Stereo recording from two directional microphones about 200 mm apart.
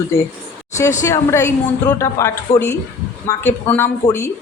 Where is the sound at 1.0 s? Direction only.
15° left (ahead or behind).